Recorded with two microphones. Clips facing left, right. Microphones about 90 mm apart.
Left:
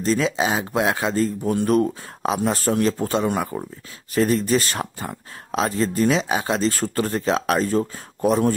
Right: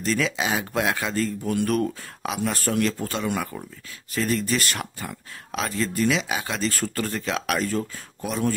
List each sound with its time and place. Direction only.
0.0 s speech: 30° left (ahead or behind)